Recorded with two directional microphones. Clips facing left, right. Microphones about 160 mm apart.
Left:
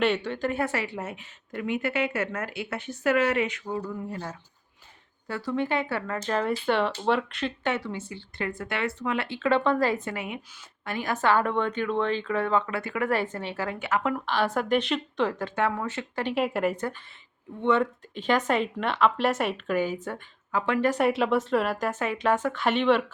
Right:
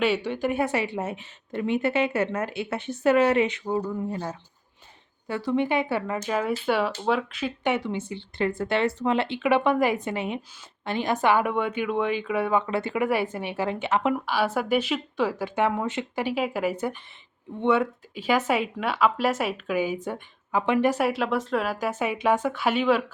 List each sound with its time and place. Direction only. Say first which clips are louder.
0.0 s a woman's voice: right 1 dB; 10° right (ahead or behind)
6.3 s speech: even; 5° right (ahead or behind)
7.6 s a woman's voice: right 6 dB; 15° right (ahead or behind)
13.1 s speech: right 2 dB; 10° right (ahead or behind)
14.3 s speech: right 1 dB; 5° right (ahead or behind)
16.3 s speech: left 2 dB; centre (ahead or behind)
21.0 s speech: left 1 dB; centre (ahead or behind)